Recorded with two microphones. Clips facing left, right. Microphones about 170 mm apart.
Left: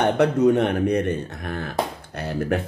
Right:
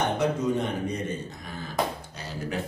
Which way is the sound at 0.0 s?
70° left (ahead or behind).